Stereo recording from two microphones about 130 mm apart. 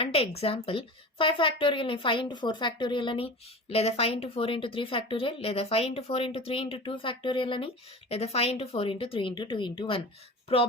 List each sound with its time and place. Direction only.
0.0 s speech: 50° left (ahead or behind)
3.7 s a woman's voice: 50° left (ahead or behind)
8.1 s a woman's voice: 50° left (ahead or behind)